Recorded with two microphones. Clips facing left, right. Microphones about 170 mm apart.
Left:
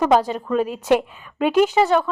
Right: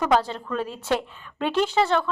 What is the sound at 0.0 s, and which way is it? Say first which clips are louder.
A woman's voice: left 5 dB; 15° left (ahead or behind).